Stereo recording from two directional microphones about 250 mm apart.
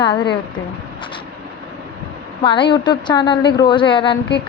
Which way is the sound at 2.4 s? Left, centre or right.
Centre.